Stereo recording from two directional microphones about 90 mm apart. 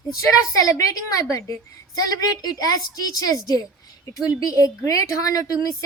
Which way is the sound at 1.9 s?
40° left (ahead or behind).